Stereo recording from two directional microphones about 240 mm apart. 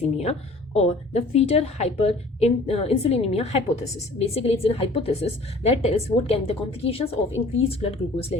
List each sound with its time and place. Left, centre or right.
0.0 s a woman's voice: left